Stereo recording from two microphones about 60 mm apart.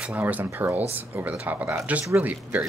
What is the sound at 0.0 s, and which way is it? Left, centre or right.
Speech, right.